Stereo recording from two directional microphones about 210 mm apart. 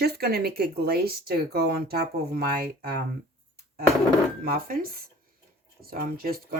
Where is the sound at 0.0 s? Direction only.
50° right (ahead or behind).